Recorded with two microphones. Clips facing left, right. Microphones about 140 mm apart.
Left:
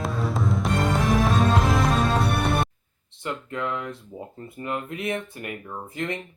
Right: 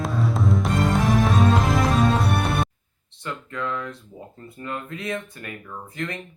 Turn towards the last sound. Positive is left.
turn(degrees=25)  # may be behind; listen again after turning